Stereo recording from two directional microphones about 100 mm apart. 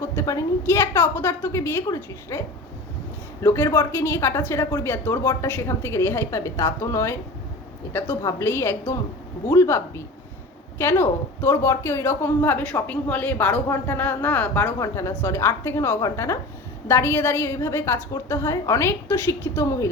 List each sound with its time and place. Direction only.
0.2 s a woman's voice: 30° left (ahead or behind)
8.2 s a woman's voice: 25° left (ahead or behind)
14.8 s a woman's voice: 30° left (ahead or behind)